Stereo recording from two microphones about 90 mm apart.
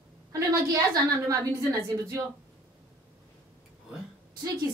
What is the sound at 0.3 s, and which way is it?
A woman's voice, 40° right (ahead or behind).